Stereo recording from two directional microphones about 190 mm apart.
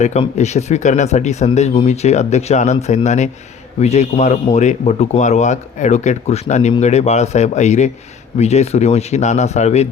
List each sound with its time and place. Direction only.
0.0 s speech: 35° left (ahead or behind)